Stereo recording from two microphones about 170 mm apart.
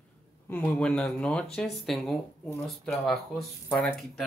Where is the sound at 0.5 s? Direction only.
10° left (ahead or behind).